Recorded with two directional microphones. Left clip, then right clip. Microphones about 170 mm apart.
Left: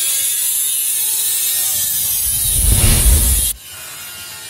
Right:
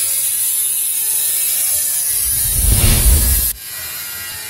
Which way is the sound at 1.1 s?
50° right (ahead or behind).